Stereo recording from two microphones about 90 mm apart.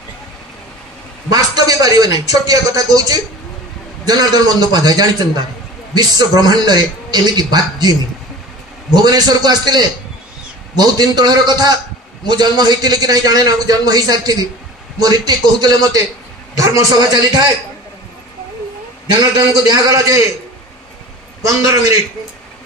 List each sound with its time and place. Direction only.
1.3 s a man's voice: 45° right (ahead or behind)
16.5 s a man's voice: 35° right (ahead or behind)
19.3 s a man's voice: 40° right (ahead or behind)
21.4 s a man's voice: 35° right (ahead or behind)